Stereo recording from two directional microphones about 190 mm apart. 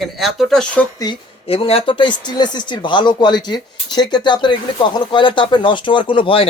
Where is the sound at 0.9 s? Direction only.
20° left (ahead or behind).